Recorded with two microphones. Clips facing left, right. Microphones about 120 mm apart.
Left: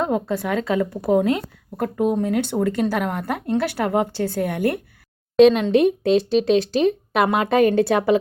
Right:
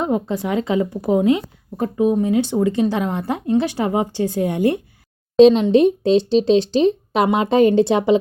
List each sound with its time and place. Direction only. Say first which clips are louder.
0.0 s speech: right 1 dB; 15° right (ahead or behind)